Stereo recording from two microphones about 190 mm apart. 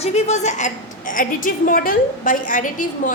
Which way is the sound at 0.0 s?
35° left (ahead or behind).